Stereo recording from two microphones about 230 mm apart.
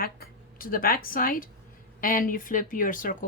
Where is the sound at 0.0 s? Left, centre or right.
Left.